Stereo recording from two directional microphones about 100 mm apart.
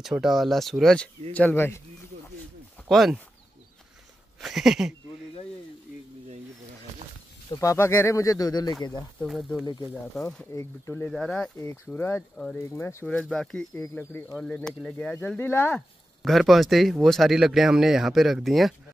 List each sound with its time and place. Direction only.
0.0 s speech: 5° right (ahead or behind)
1.3 s speech: 15° left (ahead or behind)
2.9 s speech: centre (ahead or behind)
4.4 s a sound: 5° right (ahead or behind)
7.6 s speech: 25° left (ahead or behind)
10.2 s speech: 25° left (ahead or behind)
11.1 s speech: 5° left (ahead or behind)
11.6 s speech: 25° left (ahead or behind)
12.2 s speech: 10° left (ahead or behind)
12.5 s speech: 25° left (ahead or behind)
13.0 s speech: 10° left (ahead or behind)
13.7 s speech: 20° left (ahead or behind)
14.5 s speech: 10° left (ahead or behind)
16.2 s speech: centre (ahead or behind)